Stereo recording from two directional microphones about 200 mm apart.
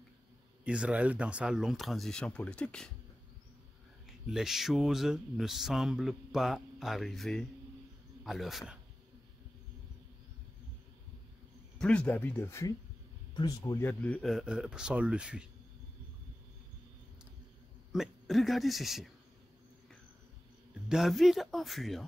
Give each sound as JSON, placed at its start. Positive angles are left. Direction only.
{"t": 0.7, "sound": "speech", "side_deg": -5}
{"t": 4.3, "sound": "a man's voice", "side_deg": 0}
{"t": 11.8, "sound": "speech", "side_deg": 5}
{"t": 17.9, "sound": "speech", "side_deg": 0}
{"t": 20.9, "sound": "speech", "side_deg": 0}